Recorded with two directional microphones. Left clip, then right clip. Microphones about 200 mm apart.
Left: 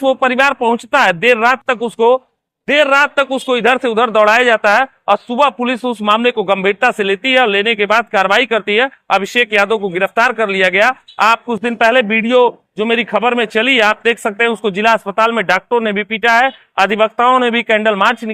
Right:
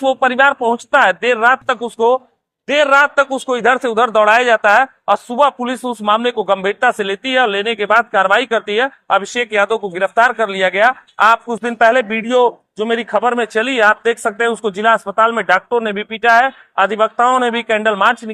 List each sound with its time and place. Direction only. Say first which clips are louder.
0.0 s a man's voice: even; 50° left (ahead or behind)